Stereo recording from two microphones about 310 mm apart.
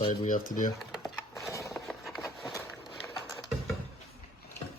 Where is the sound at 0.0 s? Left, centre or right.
Centre.